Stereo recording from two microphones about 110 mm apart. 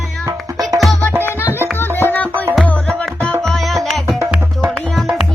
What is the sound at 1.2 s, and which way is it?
Music, 20° left (ahead or behind).